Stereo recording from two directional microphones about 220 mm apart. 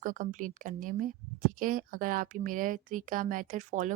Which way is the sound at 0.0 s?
35° right (ahead or behind).